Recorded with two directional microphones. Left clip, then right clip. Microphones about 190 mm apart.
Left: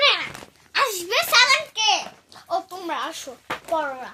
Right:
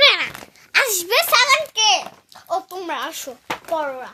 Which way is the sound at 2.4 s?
45° right (ahead or behind).